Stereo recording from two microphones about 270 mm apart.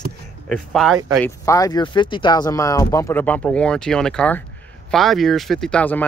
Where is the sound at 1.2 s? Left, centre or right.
Centre.